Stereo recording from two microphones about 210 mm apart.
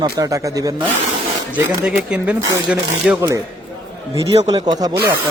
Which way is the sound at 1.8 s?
5° right (ahead or behind).